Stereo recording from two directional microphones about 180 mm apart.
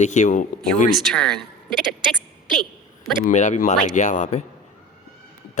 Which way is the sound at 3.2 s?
40° left (ahead or behind).